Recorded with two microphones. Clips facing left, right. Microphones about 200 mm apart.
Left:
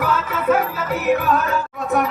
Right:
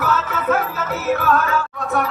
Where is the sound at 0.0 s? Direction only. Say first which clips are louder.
Left 1 dB; 10° left (ahead or behind).